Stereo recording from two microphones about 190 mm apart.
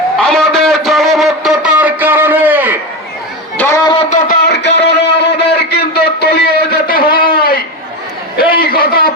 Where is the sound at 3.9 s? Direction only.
30° left (ahead or behind).